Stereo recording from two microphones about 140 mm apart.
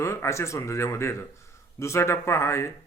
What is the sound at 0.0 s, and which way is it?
Speech, 20° left (ahead or behind).